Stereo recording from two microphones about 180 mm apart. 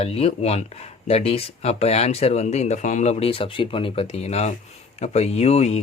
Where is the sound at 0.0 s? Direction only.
35° left (ahead or behind).